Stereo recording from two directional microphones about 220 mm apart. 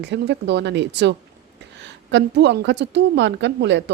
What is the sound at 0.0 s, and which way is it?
A woman's voice, 50° right (ahead or behind).